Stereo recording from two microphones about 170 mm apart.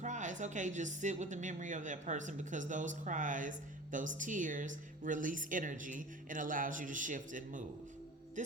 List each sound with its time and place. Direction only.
0.0 s a woman's voice: 45° right (ahead or behind)